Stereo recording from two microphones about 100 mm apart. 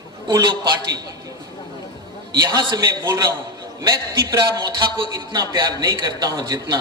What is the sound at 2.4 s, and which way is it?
A man's voice, 45° right (ahead or behind).